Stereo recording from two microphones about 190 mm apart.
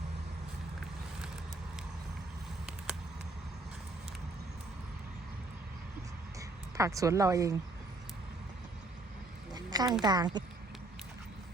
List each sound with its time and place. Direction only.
6.7 s speech: 15° right (ahead or behind)
9.5 s a sound: 20° right (ahead or behind)
10.0 s a woman's voice: 20° right (ahead or behind)